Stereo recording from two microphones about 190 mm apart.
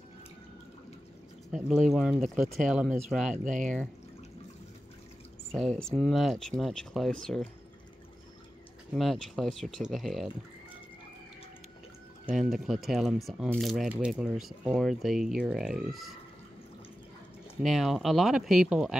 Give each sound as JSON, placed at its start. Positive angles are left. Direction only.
{"t": 1.5, "sound": "speech", "side_deg": -5}
{"t": 3.4, "sound": "speech", "side_deg": -40}
{"t": 5.5, "sound": "speech", "side_deg": 5}
{"t": 8.9, "sound": "speech", "side_deg": 0}
{"t": 12.3, "sound": "speech", "side_deg": 0}
{"t": 17.6, "sound": "speech", "side_deg": 0}